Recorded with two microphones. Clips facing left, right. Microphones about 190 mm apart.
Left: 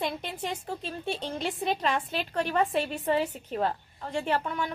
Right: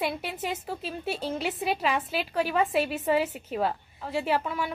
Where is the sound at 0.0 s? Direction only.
10° right (ahead or behind).